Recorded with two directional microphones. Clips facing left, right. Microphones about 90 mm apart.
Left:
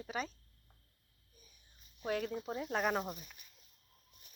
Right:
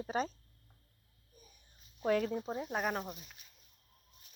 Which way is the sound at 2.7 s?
5° right (ahead or behind).